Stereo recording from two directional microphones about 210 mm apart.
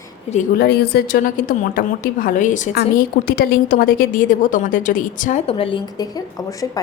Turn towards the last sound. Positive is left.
turn(degrees=15)  # may be behind; listen again after turning